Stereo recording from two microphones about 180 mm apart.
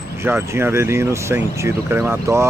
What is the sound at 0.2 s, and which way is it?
Speech, 15° right (ahead or behind).